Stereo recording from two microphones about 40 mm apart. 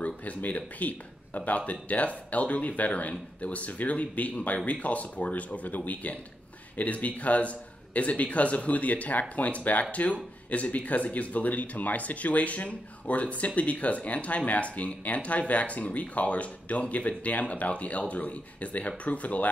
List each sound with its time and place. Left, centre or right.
0.0 s speech: left